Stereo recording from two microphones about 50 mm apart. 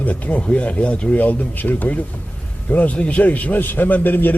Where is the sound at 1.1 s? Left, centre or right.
Left.